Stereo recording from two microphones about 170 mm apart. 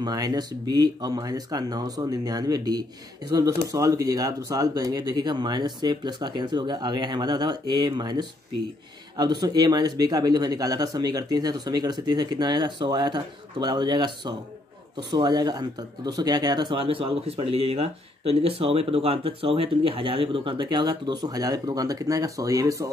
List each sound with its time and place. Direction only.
0.0 s speech: 20° right (ahead or behind)